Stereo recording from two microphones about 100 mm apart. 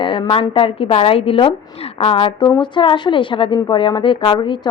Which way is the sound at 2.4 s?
50° left (ahead or behind).